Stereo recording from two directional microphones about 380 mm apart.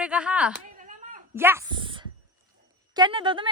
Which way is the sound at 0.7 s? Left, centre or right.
Centre.